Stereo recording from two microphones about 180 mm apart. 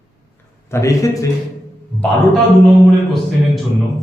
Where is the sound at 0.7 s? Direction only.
15° left (ahead or behind).